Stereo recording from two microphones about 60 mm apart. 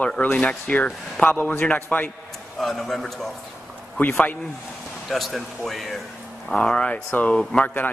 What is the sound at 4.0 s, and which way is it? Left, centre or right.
Speech, left.